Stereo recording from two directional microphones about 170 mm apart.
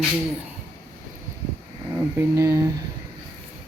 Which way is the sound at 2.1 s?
15° right (ahead or behind).